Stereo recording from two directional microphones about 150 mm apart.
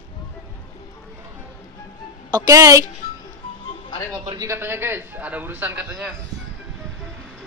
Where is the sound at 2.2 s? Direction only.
25° right (ahead or behind).